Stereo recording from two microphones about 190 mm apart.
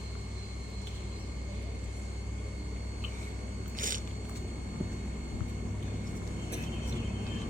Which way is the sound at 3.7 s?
45° right (ahead or behind).